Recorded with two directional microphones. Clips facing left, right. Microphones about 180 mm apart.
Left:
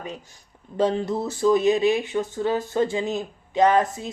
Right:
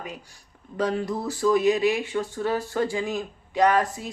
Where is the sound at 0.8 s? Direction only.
25° left (ahead or behind).